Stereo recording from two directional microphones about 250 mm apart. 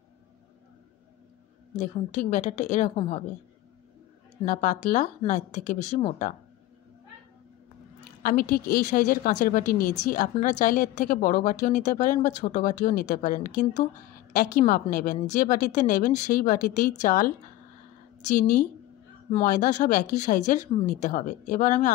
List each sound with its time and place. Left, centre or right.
1.8 s speech: left
4.5 s speech: left
8.2 s a woman's voice: left
18.3 s a woman's voice: left